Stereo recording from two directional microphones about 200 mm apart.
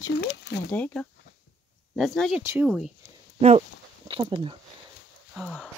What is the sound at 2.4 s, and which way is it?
Speech, 15° right (ahead or behind).